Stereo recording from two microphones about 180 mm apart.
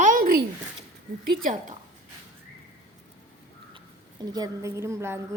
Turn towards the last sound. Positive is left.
turn(degrees=-15)  # may be behind; listen again after turning